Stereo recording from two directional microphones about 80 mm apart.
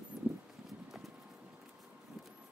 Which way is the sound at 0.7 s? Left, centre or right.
Centre.